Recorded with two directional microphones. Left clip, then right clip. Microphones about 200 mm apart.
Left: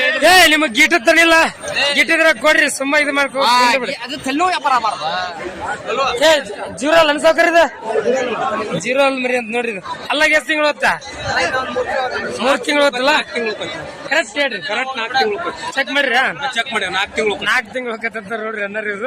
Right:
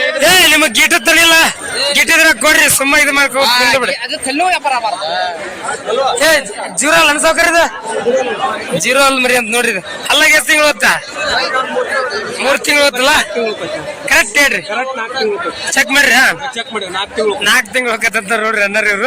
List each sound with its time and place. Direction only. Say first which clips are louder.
0.2 s a man's voice: right 2 dB; centre (ahead or behind)
3.4 s speech: left 1 dB; 60° left (ahead or behind)
6.0 s a man's voice: right 2 dB; 5° left (ahead or behind)
8.8 s a man's voice: right 6 dB; centre (ahead or behind)
12.4 s a man's voice: right 4 dB; 10° left (ahead or behind)
14.1 s speech: right 7 dB; 15° right (ahead or behind)
15.7 s speech: right 7 dB; 15° right (ahead or behind)
16.6 s speech: left 1 dB; 5° right (ahead or behind); by 18.9 s 20° right (ahead or behind)